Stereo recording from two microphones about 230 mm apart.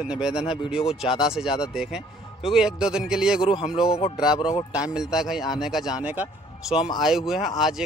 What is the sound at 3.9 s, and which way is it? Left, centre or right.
Speech, left.